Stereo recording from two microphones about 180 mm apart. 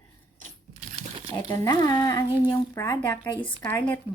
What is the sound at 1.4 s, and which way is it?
Speech, 20° left (ahead or behind).